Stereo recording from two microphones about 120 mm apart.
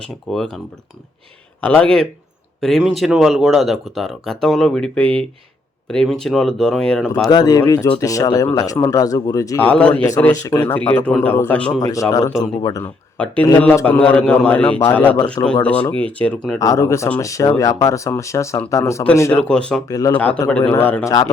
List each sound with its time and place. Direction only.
0.3 s speech: centre (ahead or behind)
1.6 s a man's voice: 10° left (ahead or behind)
7.3 s speech: 35° left (ahead or behind)
9.6 s a man's voice: 10° left (ahead or behind)
11.8 s speech: 30° left (ahead or behind)
12.8 s a man's voice: 10° left (ahead or behind)
16.6 s speech: 25° left (ahead or behind)
19.3 s a man's voice: 10° left (ahead or behind)
19.9 s speech: 30° left (ahead or behind)
20.1 s a man's voice: 10° left (ahead or behind)